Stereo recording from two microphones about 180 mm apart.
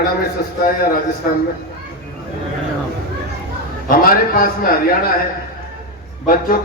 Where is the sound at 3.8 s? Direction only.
55° left (ahead or behind).